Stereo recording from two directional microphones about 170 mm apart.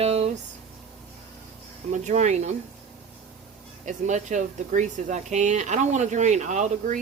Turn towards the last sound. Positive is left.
turn(degrees=-45)  # may be behind; listen again after turning